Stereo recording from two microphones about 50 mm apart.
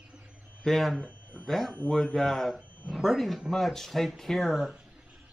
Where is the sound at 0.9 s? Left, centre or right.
Left.